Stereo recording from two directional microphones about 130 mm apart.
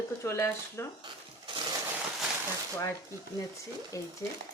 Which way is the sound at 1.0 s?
40° right (ahead or behind).